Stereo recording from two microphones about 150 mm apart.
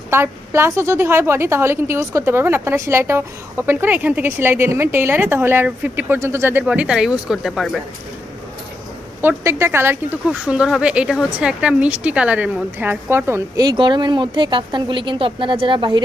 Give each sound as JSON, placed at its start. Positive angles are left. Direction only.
{"t": 0.1, "sound": "a woman's voice", "side_deg": -15}
{"t": 6.6, "sound": "speech", "side_deg": -5}
{"t": 9.2, "sound": "a woman's voice", "side_deg": -15}
{"t": 13.7, "sound": "speech", "side_deg": -30}